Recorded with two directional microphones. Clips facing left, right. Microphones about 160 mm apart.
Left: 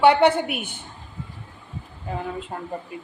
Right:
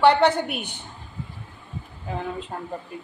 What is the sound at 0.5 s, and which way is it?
Speech, 50° left (ahead or behind).